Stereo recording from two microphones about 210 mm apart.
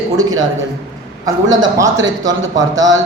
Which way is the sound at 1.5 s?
15° right (ahead or behind).